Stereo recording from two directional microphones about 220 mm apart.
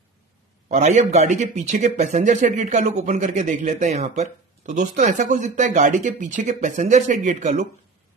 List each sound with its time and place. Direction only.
0.7 s a man's voice: 35° right (ahead or behind)